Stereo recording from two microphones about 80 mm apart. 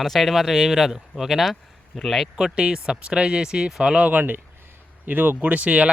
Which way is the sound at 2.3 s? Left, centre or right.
Centre.